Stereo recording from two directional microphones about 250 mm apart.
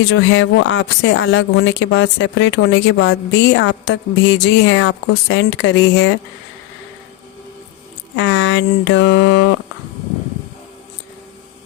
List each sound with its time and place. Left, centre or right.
0.0 s speech: left
8.1 s speech: left